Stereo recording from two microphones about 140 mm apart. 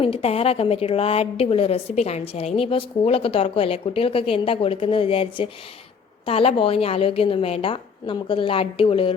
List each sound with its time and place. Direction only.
0.0 s a woman's voice: 45° left (ahead or behind)